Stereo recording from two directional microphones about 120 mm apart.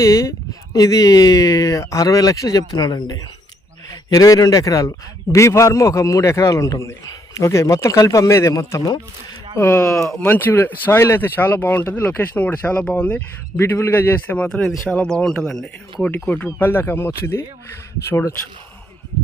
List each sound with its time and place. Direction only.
0.0 s a man's voice: 25° left (ahead or behind)
9.6 s speech: 20° left (ahead or behind)
9.8 s speech: 5° left (ahead or behind)
10.2 s speech: 15° left (ahead or behind)
16.1 s a man's voice: 15° left (ahead or behind)